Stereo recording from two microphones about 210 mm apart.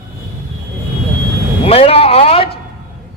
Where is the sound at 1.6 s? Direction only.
25° left (ahead or behind).